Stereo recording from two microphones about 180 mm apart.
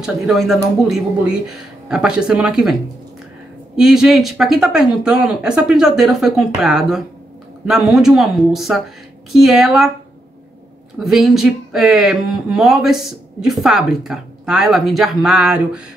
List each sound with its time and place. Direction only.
0.0 s speech: centre (ahead or behind)
3.7 s speech: 5° right (ahead or behind)
11.0 s speech: centre (ahead or behind)